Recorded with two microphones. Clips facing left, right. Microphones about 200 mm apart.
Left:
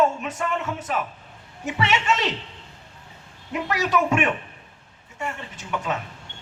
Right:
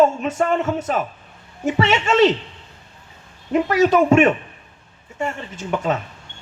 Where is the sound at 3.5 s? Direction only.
30° right (ahead or behind).